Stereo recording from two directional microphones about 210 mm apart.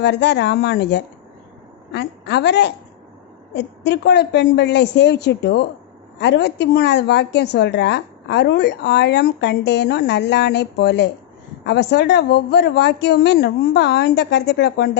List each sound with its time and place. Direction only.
0.0 s a woman's voice: 55° left (ahead or behind)